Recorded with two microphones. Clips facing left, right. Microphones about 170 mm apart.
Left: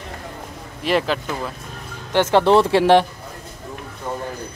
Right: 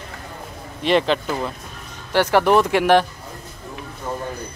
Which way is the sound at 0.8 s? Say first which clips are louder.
Right 2 dB; 5° left (ahead or behind).